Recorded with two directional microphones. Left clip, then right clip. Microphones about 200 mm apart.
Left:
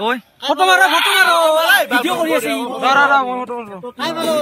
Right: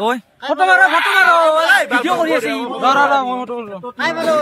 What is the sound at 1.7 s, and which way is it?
Speech, 15° right (ahead or behind).